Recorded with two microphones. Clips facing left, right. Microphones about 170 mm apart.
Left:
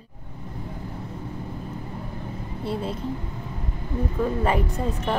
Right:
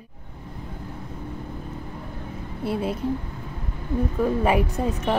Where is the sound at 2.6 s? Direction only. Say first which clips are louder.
Right 3 dB; 10° right (ahead or behind).